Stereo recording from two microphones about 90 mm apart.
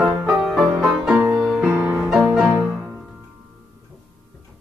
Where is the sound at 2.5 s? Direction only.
20° right (ahead or behind).